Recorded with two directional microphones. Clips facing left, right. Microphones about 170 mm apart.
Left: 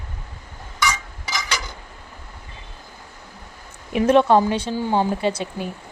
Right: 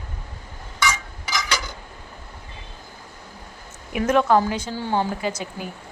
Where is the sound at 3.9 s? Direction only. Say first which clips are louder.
Left 3 dB; 25° left (ahead or behind).